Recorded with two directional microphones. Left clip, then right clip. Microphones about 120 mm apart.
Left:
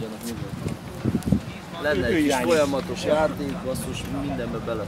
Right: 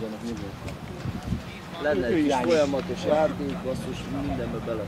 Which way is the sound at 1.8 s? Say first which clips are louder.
Left 2 dB; 45° left (ahead or behind).